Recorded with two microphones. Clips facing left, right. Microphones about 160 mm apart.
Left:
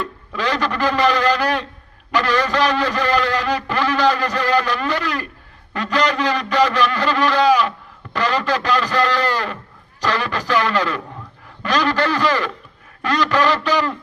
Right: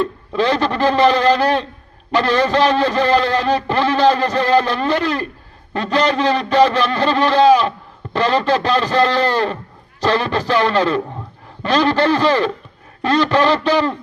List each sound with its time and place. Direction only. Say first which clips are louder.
0.0 s a man's voice: right 6 dB; 25° right (ahead or behind)